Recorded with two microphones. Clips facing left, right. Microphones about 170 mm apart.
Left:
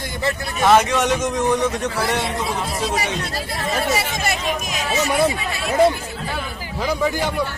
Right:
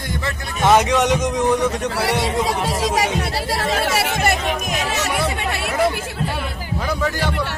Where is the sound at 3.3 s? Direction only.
80° right.